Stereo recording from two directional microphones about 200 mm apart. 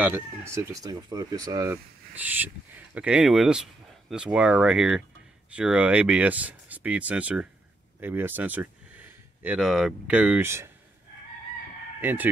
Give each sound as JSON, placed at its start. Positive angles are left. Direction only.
{"t": 0.0, "sound": "speech", "side_deg": -10}
{"t": 12.0, "sound": "speech", "side_deg": -10}